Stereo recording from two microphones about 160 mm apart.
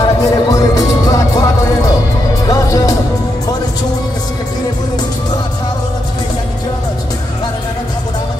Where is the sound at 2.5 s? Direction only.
20° left (ahead or behind).